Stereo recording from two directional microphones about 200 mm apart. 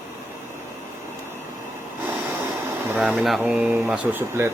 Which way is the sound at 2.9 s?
Centre (ahead or behind).